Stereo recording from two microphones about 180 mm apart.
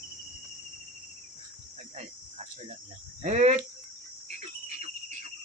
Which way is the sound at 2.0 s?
40° right (ahead or behind).